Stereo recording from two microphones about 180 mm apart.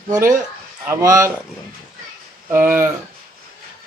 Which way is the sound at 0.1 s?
15° right (ahead or behind).